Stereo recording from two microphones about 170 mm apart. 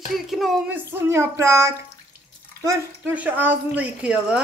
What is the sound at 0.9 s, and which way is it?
Speech, 15° right (ahead or behind).